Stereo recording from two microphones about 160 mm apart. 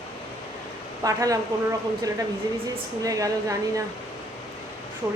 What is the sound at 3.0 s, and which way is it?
Speech, 20° right (ahead or behind).